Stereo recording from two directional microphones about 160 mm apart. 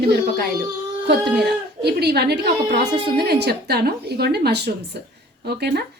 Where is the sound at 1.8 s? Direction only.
90° right.